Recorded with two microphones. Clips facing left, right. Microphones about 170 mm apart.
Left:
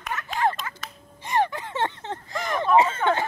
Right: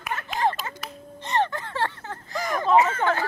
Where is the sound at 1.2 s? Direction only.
10° left (ahead or behind).